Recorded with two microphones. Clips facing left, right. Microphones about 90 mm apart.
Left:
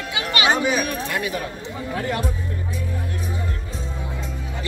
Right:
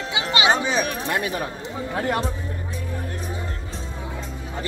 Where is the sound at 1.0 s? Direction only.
35° right (ahead or behind).